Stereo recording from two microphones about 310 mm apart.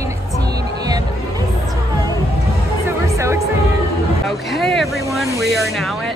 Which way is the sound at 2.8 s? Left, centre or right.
Centre.